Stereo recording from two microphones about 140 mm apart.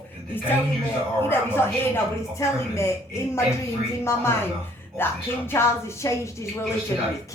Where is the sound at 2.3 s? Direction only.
20° left (ahead or behind).